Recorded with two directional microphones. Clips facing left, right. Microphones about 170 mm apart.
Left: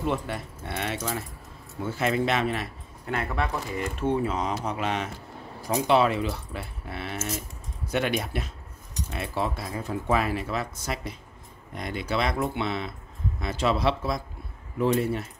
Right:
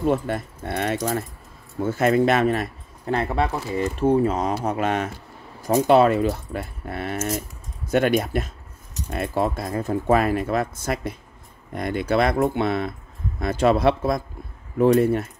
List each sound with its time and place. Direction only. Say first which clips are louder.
0.0 s speech: right 7 dB; 45° right (ahead or behind)
3.2 s speech: right 5 dB; 30° right (ahead or behind); by 15.2 s 50° right (ahead or behind)